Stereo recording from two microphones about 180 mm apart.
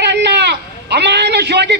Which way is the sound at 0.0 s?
70° right (ahead or behind).